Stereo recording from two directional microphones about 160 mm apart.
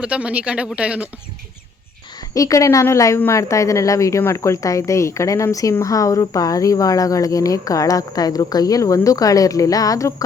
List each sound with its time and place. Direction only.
0.0 s speech: 5° right (ahead or behind)
2.3 s a woman's voice: 20° left (ahead or behind)